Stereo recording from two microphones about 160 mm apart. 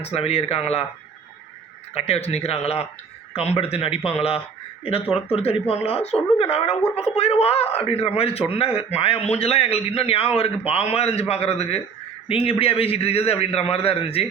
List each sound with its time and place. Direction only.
0.0 s a man's voice: 40° left (ahead or behind)
1.9 s a man's voice: 40° left (ahead or behind)